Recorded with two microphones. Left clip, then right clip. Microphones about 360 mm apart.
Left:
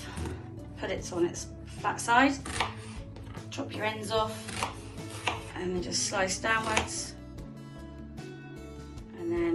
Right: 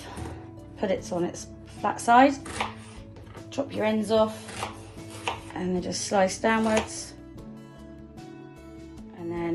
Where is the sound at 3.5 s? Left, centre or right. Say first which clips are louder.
Right 6 dB; right.